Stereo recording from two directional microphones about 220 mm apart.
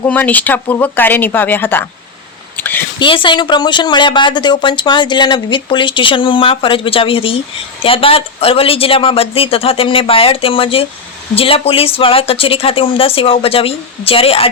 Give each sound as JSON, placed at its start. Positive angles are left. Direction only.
{"t": 0.0, "sound": "speech", "side_deg": 5}
{"t": 2.6, "sound": "a sound", "side_deg": 10}
{"t": 3.0, "sound": "a woman's voice", "side_deg": 20}